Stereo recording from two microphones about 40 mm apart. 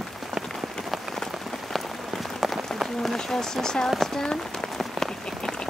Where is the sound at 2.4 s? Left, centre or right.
Centre.